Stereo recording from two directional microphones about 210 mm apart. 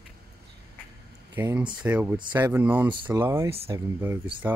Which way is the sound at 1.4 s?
10° right (ahead or behind).